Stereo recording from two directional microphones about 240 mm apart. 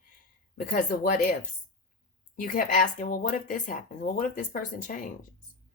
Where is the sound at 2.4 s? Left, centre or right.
Left.